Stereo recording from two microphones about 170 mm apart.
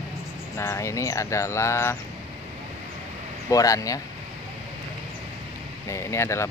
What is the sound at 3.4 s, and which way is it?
Speech, 20° left (ahead or behind).